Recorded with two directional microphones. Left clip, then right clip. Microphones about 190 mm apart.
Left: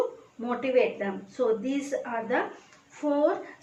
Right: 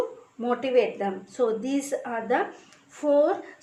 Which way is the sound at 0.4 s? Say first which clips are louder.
Right 2 dB; 50° right (ahead or behind).